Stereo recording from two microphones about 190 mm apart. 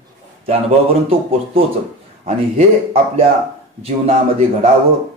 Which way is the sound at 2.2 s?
30° right (ahead or behind).